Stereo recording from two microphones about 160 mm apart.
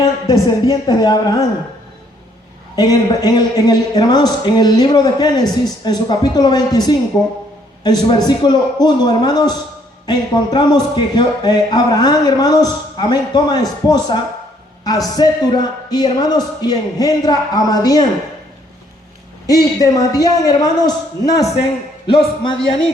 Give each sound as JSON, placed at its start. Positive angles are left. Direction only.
{"t": 0.0, "sound": "speech", "side_deg": 25}
{"t": 2.7, "sound": "speech", "side_deg": 25}
{"t": 19.5, "sound": "speech", "side_deg": 20}
{"t": 22.0, "sound": "speech", "side_deg": 35}